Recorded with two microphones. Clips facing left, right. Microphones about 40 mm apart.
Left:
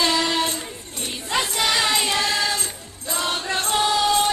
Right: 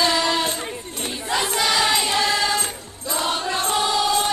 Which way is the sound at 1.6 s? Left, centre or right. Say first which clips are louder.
Right 1 dB; centre.